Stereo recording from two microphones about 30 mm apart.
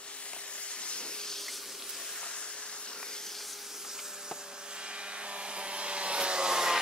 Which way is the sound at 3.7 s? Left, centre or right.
Centre.